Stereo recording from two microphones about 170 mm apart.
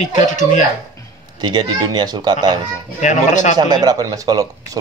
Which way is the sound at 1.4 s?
25° right (ahead or behind).